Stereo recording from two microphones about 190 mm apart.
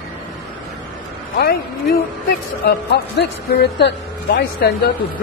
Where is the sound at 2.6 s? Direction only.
60° left (ahead or behind).